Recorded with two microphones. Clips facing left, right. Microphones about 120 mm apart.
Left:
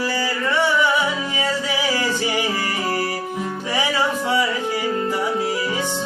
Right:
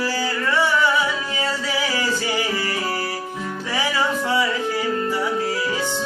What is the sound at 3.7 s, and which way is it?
Music, 15° left (ahead or behind).